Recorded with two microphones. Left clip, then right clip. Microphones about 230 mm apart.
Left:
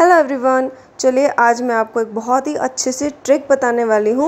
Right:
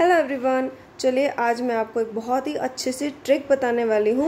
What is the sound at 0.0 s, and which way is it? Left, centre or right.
A woman's voice, centre.